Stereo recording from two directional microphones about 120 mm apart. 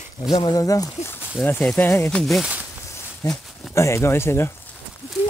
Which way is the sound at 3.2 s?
30° left (ahead or behind).